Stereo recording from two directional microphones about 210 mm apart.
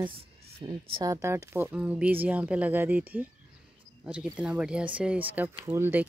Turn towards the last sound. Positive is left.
turn(degrees=-10)  # may be behind; listen again after turning